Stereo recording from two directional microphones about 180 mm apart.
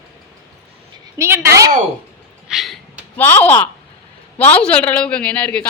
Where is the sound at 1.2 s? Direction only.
15° right (ahead or behind).